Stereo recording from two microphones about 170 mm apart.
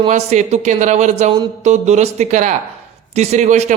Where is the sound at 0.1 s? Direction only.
45° right (ahead or behind).